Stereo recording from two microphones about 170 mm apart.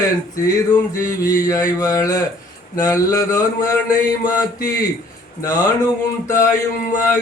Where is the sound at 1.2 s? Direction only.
20° left (ahead or behind).